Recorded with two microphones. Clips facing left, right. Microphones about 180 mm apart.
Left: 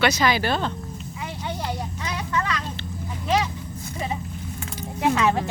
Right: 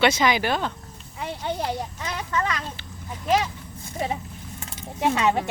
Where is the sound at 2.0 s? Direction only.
45° right (ahead or behind).